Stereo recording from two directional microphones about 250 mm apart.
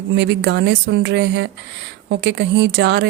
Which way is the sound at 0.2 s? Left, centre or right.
Right.